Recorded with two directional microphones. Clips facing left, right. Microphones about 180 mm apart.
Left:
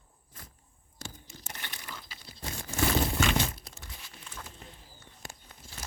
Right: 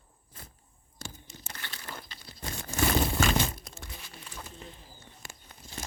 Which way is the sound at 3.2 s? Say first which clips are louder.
Right 1 dB; 50° right (ahead or behind).